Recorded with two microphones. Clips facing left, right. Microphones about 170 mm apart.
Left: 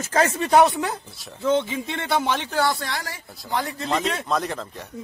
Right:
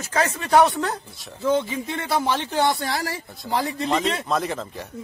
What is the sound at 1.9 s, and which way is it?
Speech, 5° right (ahead or behind).